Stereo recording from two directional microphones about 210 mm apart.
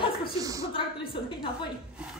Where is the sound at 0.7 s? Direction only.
25° left (ahead or behind).